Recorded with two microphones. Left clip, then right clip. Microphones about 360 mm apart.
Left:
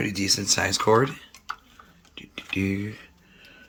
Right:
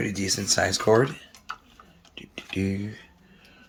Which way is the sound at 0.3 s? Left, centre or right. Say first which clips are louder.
Even; centre.